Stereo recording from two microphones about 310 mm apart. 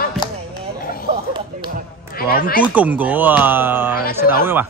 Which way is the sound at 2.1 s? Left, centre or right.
Left.